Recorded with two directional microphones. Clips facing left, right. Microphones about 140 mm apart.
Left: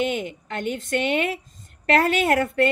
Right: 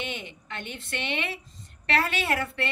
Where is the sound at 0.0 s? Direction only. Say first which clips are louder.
Left 11 dB; 45° left (ahead or behind).